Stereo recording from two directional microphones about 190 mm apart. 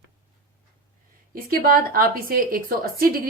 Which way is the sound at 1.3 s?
50° right (ahead or behind).